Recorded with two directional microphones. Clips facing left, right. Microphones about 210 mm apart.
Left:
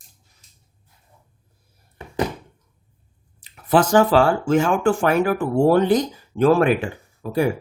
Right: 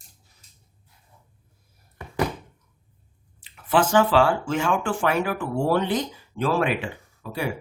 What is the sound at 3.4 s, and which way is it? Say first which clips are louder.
Speech: left 4 dB; 40° left (ahead or behind).